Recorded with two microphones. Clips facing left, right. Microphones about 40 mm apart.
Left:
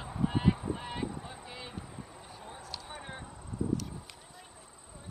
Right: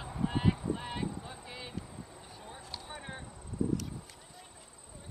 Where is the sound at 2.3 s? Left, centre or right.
Centre.